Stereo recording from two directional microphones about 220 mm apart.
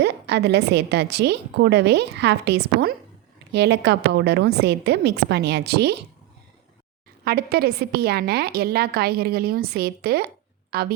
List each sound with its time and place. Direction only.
0.0 s a woman's voice: 50° right (ahead or behind)
7.3 s a woman's voice: 45° right (ahead or behind)